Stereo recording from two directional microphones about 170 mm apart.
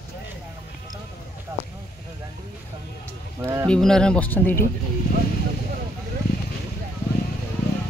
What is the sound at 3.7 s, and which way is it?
Speech, 5° left (ahead or behind).